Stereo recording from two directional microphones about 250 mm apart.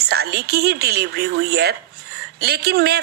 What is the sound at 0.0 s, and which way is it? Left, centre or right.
A woman's voice, right.